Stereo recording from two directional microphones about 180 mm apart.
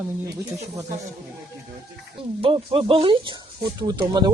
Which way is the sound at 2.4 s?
30° right (ahead or behind).